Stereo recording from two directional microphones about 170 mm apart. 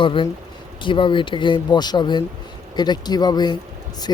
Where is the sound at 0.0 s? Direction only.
30° left (ahead or behind).